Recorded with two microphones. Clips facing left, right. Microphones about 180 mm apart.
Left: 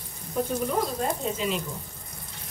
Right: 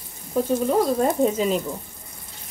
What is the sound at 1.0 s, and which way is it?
Speech, 50° right (ahead or behind).